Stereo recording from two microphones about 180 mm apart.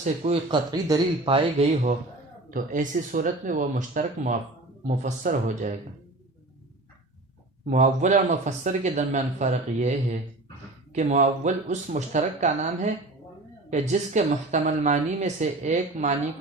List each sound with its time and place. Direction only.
0.4 s speech: 25° right (ahead or behind)
2.5 s a woman's voice: 45° right (ahead or behind)
7.7 s a woman's voice: 45° right (ahead or behind)